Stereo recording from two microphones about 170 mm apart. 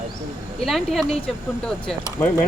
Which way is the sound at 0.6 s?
Centre (ahead or behind).